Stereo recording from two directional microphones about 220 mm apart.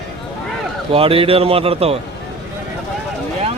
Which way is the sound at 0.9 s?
25° right (ahead or behind).